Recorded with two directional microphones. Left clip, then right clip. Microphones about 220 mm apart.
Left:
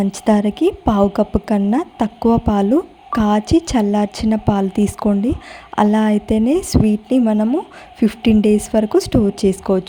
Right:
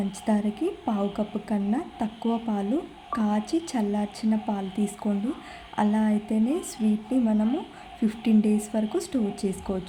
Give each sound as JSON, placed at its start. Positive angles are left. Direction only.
{"t": 0.1, "sound": "a woman's voice", "side_deg": 45}